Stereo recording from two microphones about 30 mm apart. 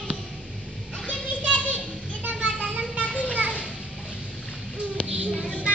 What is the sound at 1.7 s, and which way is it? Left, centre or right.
Children playing, right.